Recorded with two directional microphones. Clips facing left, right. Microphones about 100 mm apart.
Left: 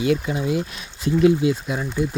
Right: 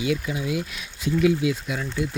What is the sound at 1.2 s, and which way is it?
Speech, 30° left (ahead or behind).